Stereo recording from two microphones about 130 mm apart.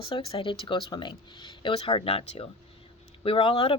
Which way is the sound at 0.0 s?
45° left (ahead or behind).